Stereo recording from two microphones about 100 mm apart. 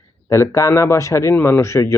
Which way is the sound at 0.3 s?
30° left (ahead or behind).